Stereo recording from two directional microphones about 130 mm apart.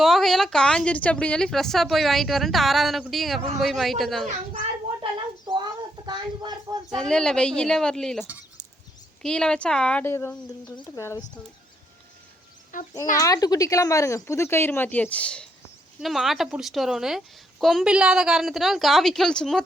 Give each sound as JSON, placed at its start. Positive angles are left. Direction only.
{"t": 0.0, "sound": "a woman's voice", "side_deg": 0}
{"t": 5.5, "sound": "a sound", "side_deg": -35}
{"t": 6.9, "sound": "a woman's voice", "side_deg": 5}
{"t": 9.2, "sound": "a woman's voice", "side_deg": 5}
{"t": 10.0, "sound": "speech", "side_deg": 15}
{"t": 12.7, "sound": "a child's voice", "side_deg": 90}
{"t": 13.1, "sound": "a woman's voice", "side_deg": 25}